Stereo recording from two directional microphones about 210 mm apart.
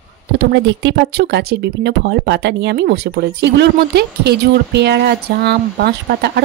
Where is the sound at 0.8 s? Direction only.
55° right (ahead or behind).